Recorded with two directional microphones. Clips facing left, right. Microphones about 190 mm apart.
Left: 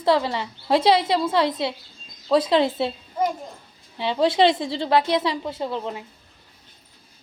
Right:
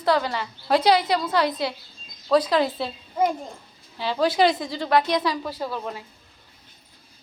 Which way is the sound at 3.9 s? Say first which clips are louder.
Left 2 dB; 25° left (ahead or behind).